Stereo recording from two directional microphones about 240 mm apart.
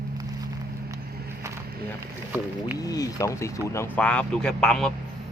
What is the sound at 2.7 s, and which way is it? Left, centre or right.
Speech, centre.